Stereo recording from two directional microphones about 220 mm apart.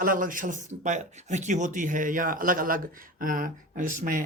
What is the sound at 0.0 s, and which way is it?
Speech, 40° right (ahead or behind).